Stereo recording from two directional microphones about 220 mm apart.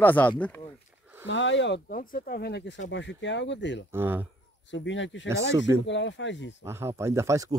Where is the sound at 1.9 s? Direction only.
40° left (ahead or behind).